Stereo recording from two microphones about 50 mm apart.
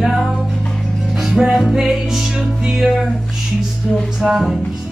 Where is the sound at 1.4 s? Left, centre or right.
Centre.